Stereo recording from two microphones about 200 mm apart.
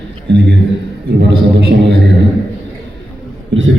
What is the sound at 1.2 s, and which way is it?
Speech, 60° right (ahead or behind).